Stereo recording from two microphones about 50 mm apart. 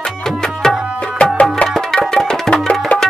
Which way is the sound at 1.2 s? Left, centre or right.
Left.